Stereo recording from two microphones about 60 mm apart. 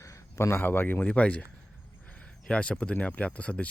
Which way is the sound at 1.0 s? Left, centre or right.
Left.